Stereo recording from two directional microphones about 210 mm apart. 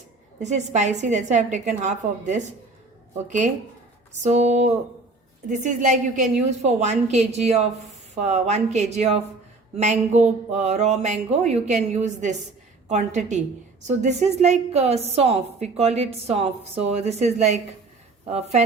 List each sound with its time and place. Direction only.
0.3 s a woman's voice: 35° right (ahead or behind)